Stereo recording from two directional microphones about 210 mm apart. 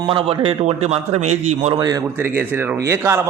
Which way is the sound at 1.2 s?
90° right.